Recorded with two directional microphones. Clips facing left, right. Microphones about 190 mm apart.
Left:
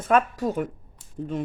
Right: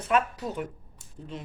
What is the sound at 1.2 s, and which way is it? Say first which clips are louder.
Speech: left 11 dB; 60° left (ahead or behind).